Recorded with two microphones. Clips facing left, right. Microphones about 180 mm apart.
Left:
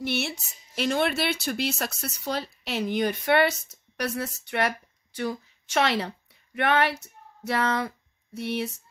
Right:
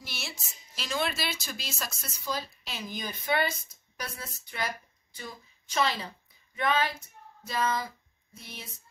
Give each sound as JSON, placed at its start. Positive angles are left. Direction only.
{"t": 0.0, "sound": "a woman's voice", "side_deg": 65}